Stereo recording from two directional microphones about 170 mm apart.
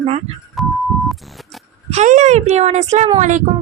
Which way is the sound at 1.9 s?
45° right (ahead or behind).